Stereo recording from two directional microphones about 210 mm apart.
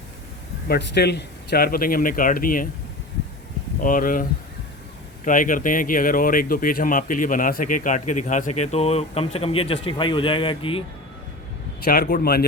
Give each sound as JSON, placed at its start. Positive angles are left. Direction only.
{"t": 0.7, "sound": "speech", "side_deg": 50}
{"t": 3.8, "sound": "speech", "side_deg": 40}
{"t": 11.9, "sound": "speech", "side_deg": 40}